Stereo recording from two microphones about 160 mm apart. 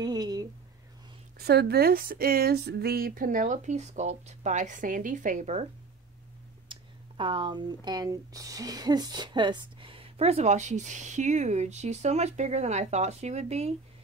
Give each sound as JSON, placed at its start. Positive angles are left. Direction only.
{"t": 0.0, "sound": "a sound", "side_deg": -25}
{"t": 1.4, "sound": "speech", "side_deg": -85}
{"t": 6.7, "sound": "speech", "side_deg": -30}